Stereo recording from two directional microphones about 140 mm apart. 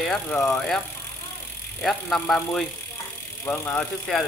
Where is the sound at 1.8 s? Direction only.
5° left (ahead or behind).